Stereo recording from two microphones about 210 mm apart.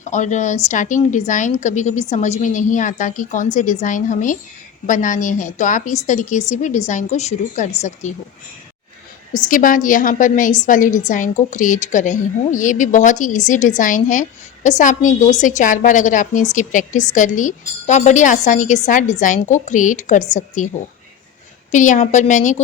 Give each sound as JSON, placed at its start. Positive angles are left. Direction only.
{"t": 0.1, "sound": "a woman's voice", "side_deg": 35}
{"t": 9.3, "sound": "a woman's voice", "side_deg": 40}
{"t": 21.7, "sound": "a woman's voice", "side_deg": 35}